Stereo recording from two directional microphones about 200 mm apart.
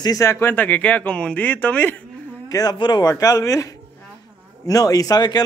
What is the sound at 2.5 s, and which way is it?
A man's voice, 20° left (ahead or behind).